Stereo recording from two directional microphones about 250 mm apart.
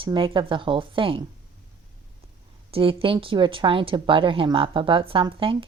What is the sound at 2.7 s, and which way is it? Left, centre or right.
A woman's voice, right.